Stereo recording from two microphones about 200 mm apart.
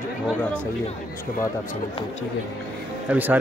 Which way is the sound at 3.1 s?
10° right (ahead or behind).